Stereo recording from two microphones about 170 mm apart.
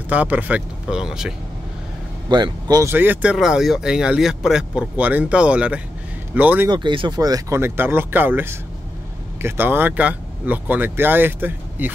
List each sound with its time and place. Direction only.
0.1 s speech: 10° right (ahead or behind)
2.2 s speech: 25° right (ahead or behind)
6.7 s speech: 30° right (ahead or behind); by 11.9 s 10° right (ahead or behind)